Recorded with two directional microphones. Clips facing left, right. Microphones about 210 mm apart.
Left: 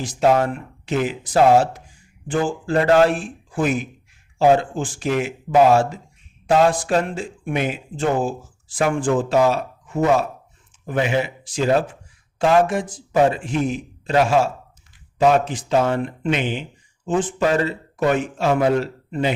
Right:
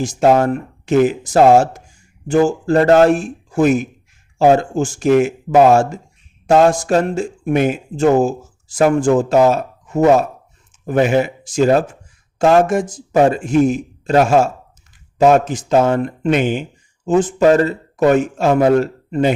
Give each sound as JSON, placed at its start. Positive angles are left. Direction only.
{"t": 0.0, "sound": "speech", "side_deg": -45}